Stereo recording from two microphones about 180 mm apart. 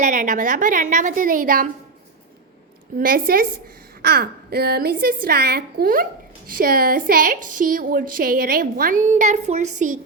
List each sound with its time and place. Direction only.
0.0 s a woman's voice: 45° right (ahead or behind)
3.0 s a woman's voice: 50° right (ahead or behind)